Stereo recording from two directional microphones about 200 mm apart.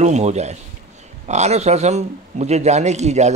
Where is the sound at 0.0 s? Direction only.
35° right (ahead or behind).